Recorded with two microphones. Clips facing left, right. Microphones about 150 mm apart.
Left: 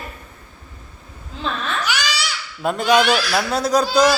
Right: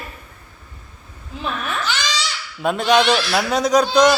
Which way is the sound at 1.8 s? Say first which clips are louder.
Even; 10° left (ahead or behind).